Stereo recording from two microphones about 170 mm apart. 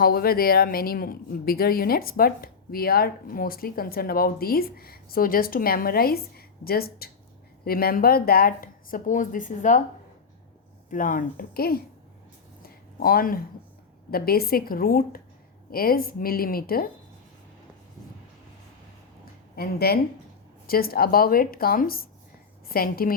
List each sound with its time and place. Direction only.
0.0 s speech: 60° left (ahead or behind)
10.8 s speech: 50° left (ahead or behind)
12.6 s a sound: 60° left (ahead or behind)
14.1 s speech: 60° left (ahead or behind)
19.2 s a sound: 65° left (ahead or behind)
20.7 s speech: 60° left (ahead or behind)